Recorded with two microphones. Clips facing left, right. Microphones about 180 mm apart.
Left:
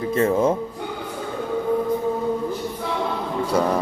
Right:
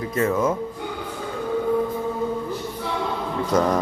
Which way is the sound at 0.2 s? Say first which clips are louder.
Left 2 dB; 30° left (ahead or behind).